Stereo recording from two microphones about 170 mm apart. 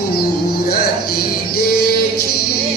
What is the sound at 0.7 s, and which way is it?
Music, 65° left (ahead or behind).